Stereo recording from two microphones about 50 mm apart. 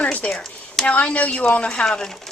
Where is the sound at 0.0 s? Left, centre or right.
Left.